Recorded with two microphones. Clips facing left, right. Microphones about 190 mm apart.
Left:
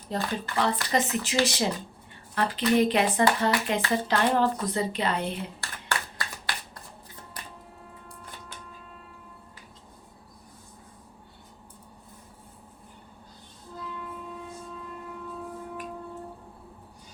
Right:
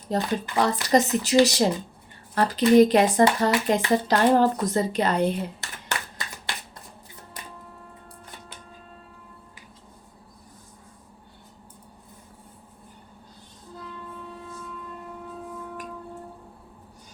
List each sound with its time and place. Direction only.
0.1 s speech: 40° right (ahead or behind)
5.5 s finger snapping: 20° right (ahead or behind)